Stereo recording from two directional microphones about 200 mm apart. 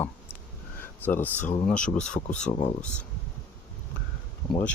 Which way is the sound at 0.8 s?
10° left (ahead or behind).